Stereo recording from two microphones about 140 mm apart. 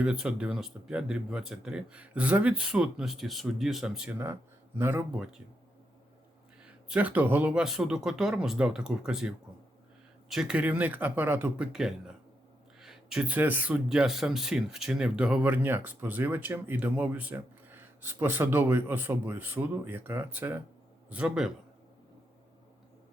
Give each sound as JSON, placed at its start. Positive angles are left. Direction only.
{"t": 0.0, "sound": "speech", "side_deg": -5}
{"t": 4.8, "sound": "speech", "side_deg": -15}
{"t": 5.1, "sound": "speech", "side_deg": -5}
{"t": 6.7, "sound": "speech", "side_deg": -10}